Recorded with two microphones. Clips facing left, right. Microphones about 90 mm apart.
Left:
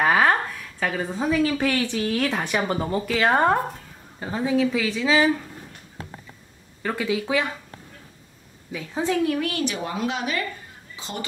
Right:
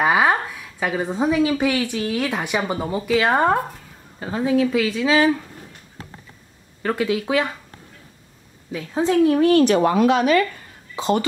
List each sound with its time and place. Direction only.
0.0 s speech: 10° right (ahead or behind)
4.6 s speech: 20° left (ahead or behind)
4.9 s speech: 15° right (ahead or behind)
7.2 s speech: 20° right (ahead or behind)
8.9 s speech: 20° right (ahead or behind)
9.5 s speech: 45° right (ahead or behind)
9.8 s speech: 65° right (ahead or behind)